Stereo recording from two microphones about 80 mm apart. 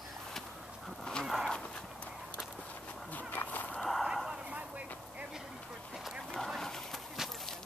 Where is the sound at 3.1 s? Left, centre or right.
Left.